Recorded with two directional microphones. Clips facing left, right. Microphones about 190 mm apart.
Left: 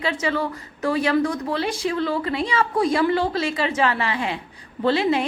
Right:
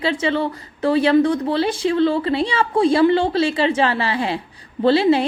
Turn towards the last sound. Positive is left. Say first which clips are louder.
# right 5 dB
turn(degrees=-30)  # may be behind; listen again after turning